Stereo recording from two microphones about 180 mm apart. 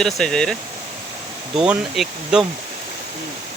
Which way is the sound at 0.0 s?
5° left (ahead or behind).